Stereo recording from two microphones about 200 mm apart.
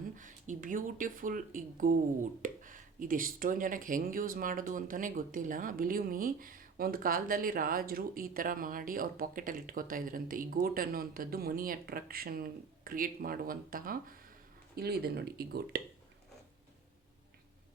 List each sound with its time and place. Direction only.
0.2 s speech: 40° right (ahead or behind)